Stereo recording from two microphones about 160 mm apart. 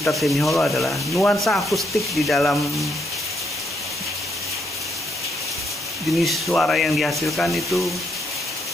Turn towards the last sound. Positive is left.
turn(degrees=0)  # may be behind; listen again after turning